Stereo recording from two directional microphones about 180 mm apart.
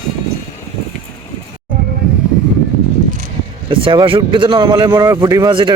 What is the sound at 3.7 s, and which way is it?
Speech, 30° right (ahead or behind).